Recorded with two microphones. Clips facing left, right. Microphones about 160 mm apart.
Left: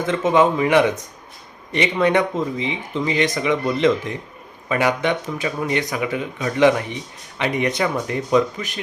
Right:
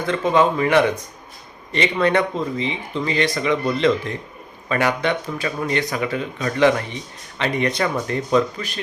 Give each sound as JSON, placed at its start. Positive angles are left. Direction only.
{"t": 0.0, "sound": "speech", "side_deg": 20}